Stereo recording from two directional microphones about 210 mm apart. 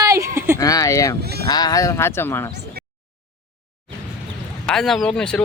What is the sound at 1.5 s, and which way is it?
Speech, 20° left (ahead or behind).